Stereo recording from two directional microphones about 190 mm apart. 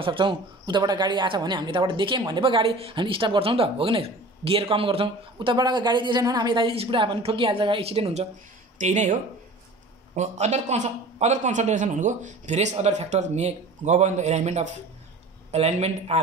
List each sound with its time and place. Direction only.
0.0 s speech: 25° right (ahead or behind)